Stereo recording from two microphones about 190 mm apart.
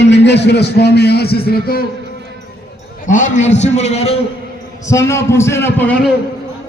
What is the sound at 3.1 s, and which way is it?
A man's voice, 40° left (ahead or behind).